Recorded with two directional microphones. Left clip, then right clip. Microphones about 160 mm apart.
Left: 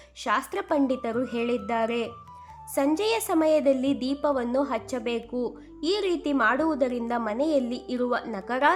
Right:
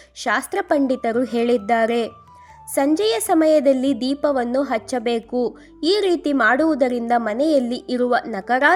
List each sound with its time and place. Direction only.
0.2 s a woman's voice: 30° right (ahead or behind)